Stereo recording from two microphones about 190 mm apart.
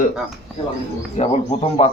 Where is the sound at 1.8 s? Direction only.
30° left (ahead or behind).